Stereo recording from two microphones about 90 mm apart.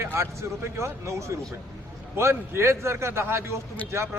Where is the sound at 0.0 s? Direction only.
30° right (ahead or behind).